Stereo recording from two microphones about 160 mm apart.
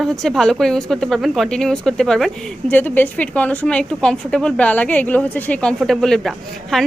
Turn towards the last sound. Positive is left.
turn(degrees=0)  # may be behind; listen again after turning